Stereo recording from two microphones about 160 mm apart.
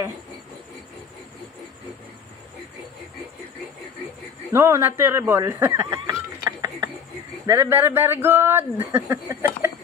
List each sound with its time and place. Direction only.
4.5 s a man's voice: 15° right (ahead or behind)
5.9 s snicker: 25° right (ahead or behind)
7.4 s a man's voice: 15° right (ahead or behind)